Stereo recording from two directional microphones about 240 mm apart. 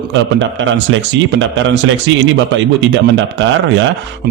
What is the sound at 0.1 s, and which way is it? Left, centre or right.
A man's voice, right.